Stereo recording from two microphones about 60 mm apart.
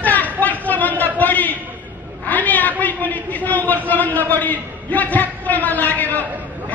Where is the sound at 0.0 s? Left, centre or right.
Left.